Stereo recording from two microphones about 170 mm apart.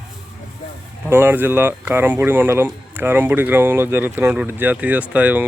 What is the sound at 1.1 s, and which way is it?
Speech, 15° right (ahead or behind).